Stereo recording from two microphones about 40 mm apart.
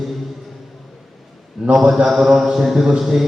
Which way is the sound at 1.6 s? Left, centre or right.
Centre.